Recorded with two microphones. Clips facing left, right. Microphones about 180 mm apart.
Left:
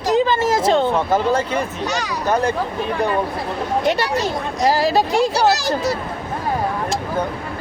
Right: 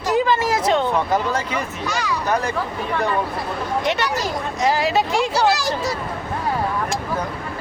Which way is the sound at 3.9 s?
35° left (ahead or behind).